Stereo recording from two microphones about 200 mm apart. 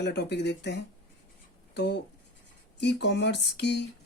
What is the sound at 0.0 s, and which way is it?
Speech, 55° left (ahead or behind).